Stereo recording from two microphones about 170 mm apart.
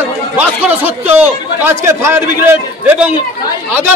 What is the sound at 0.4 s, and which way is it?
A man's voice, 10° right (ahead or behind).